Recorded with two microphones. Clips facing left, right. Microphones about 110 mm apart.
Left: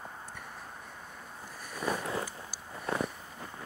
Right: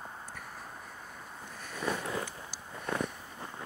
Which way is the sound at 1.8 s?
25° left (ahead or behind).